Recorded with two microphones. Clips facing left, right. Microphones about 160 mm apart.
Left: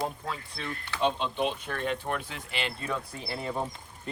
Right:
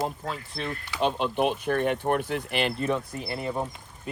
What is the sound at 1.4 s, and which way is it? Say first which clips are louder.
Speech: right 6 dB; 55° right (ahead or behind).